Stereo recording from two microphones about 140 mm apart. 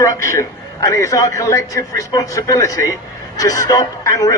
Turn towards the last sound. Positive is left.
turn(degrees=25)  # may be behind; listen again after turning